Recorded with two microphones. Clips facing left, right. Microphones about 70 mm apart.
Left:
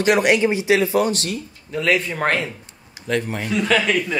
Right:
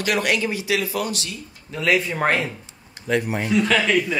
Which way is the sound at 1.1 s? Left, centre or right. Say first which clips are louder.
Left 6 dB; left.